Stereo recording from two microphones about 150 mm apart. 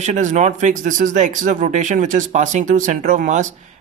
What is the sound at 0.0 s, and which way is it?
Speech, 50° right (ahead or behind).